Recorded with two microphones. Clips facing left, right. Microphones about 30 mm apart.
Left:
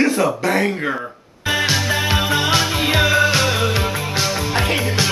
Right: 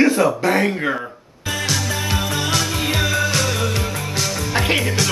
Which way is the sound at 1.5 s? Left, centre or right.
Left.